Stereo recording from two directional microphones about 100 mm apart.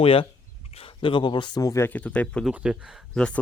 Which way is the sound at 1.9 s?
15° left (ahead or behind).